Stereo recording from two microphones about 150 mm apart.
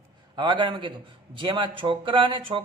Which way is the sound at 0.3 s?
30° right (ahead or behind).